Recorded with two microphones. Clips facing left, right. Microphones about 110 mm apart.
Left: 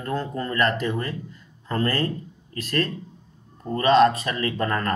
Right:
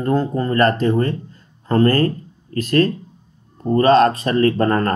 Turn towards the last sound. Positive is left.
turn(degrees=-40)  # may be behind; listen again after turning